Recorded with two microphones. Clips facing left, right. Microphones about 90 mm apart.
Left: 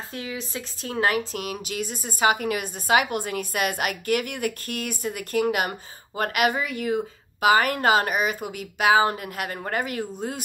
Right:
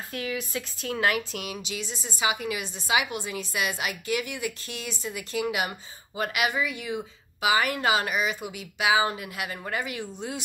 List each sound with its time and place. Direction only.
0.1 s a woman's voice: 30° left (ahead or behind)